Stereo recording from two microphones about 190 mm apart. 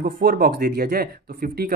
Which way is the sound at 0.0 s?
50° right (ahead or behind).